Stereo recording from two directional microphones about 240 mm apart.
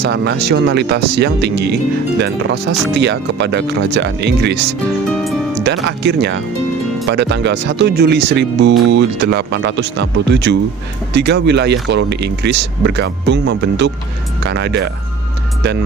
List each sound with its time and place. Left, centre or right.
0.0 s speech: right
5.6 s speech: right